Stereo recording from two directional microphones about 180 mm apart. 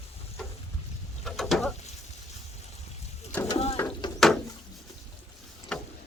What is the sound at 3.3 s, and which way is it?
Mechanisms, 15° left (ahead or behind).